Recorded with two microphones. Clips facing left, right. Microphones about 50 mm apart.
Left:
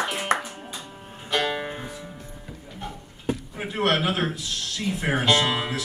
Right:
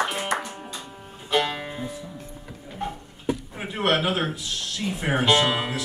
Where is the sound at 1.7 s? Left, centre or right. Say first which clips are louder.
Right 2 dB; left.